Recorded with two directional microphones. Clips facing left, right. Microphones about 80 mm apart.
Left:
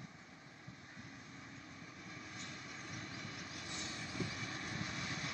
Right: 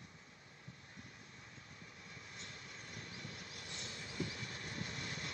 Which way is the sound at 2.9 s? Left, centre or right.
Left.